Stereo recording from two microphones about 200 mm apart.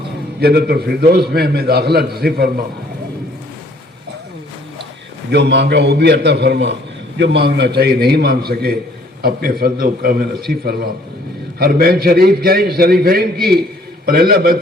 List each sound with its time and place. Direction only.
0.3 s a man's voice: 55° right (ahead or behind)
5.3 s a man's voice: 60° right (ahead or behind)